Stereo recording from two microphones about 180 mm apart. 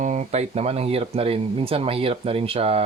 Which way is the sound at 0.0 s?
40° right (ahead or behind).